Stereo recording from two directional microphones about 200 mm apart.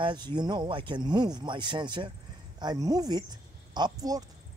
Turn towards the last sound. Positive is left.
turn(degrees=-20)  # may be behind; listen again after turning